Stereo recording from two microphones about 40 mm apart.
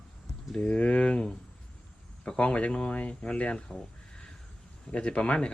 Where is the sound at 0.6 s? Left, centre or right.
Left.